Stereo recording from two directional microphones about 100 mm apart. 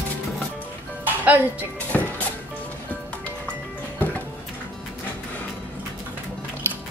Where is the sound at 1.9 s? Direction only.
15° left (ahead or behind).